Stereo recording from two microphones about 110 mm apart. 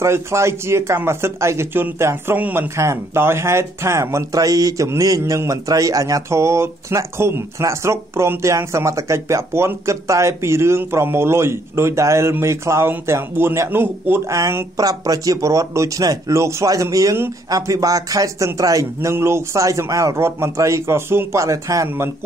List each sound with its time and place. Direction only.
0.0 s speech: 25° right (ahead or behind)
2.7 s speech: 25° right (ahead or behind)